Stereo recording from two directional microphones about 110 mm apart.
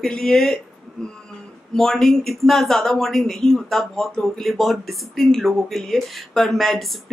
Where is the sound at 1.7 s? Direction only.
5° left (ahead or behind).